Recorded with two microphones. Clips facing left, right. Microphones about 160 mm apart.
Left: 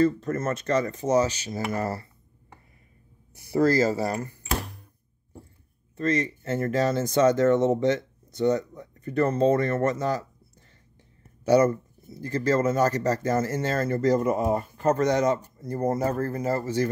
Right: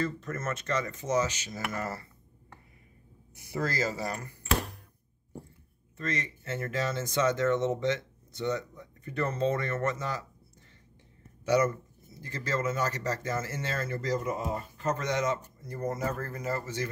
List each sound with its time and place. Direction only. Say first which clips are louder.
0.0 s speech: left 10 dB; 35° left (ahead or behind)
3.3 s speech: left 11 dB; 35° left (ahead or behind)
5.9 s speech: left 9 dB; 35° left (ahead or behind)
11.4 s speech: left 6 dB; 35° left (ahead or behind)